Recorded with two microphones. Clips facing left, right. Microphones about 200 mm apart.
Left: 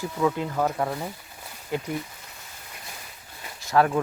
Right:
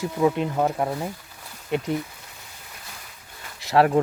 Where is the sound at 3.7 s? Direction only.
25° right (ahead or behind).